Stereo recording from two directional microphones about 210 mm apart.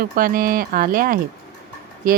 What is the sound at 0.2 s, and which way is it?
Speech, 45° right (ahead or behind).